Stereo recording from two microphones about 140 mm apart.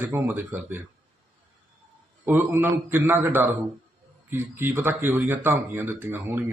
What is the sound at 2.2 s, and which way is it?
Speech, 15° right (ahead or behind).